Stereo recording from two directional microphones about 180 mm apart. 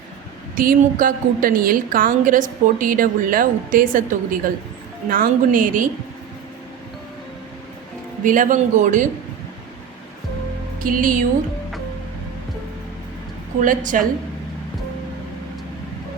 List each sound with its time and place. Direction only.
0.5 s a woman's voice: 50° right (ahead or behind)
8.2 s a woman's voice: 50° right (ahead or behind)
10.8 s speech: 50° right (ahead or behind)
13.6 s a woman's voice: 45° right (ahead or behind)